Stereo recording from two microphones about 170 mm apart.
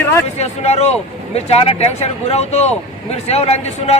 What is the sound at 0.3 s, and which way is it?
A man's voice, 40° left (ahead or behind).